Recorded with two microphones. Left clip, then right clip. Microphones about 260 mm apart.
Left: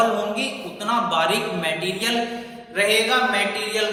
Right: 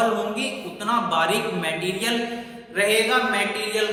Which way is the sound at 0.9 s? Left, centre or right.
Centre.